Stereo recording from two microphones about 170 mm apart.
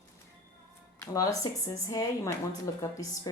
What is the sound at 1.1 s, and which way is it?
A woman's voice, 20° left (ahead or behind).